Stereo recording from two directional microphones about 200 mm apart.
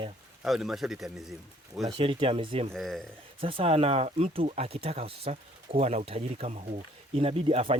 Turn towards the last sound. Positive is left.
turn(degrees=-30)  # may be behind; listen again after turning